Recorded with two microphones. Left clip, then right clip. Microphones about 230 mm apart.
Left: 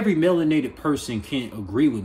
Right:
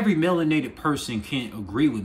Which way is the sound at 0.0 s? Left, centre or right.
Centre.